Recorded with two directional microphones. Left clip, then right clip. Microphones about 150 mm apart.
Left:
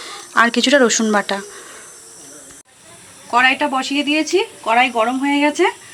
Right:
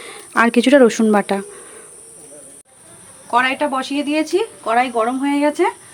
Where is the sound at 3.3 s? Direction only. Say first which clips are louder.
Left 2 dB; 5° right (ahead or behind).